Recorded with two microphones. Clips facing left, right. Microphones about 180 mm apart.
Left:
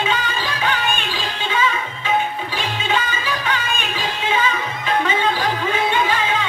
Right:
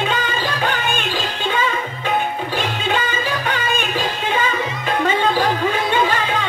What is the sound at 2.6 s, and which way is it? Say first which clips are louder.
Music: even; 50° right (ahead or behind).